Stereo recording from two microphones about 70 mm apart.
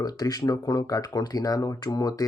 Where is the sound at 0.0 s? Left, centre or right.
Left.